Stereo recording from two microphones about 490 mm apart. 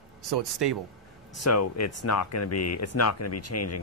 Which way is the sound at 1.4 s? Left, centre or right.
Left.